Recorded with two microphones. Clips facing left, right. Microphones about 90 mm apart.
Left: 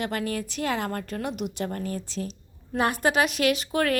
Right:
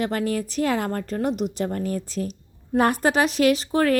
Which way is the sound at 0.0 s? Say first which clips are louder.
Right 5 dB; 40° right (ahead or behind).